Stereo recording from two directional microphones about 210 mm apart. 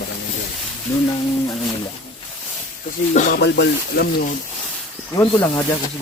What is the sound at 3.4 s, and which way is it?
Speech, 55° left (ahead or behind).